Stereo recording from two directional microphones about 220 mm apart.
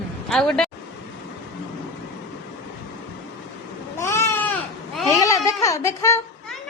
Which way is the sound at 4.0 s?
10° left (ahead or behind).